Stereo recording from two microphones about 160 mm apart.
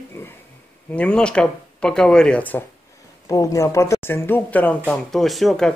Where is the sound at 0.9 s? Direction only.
5° left (ahead or behind).